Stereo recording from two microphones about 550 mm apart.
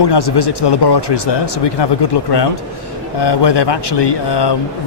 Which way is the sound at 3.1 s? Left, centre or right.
Left.